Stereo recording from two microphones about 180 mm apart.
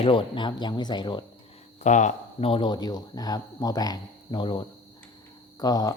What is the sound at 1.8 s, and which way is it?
Speech, 40° left (ahead or behind).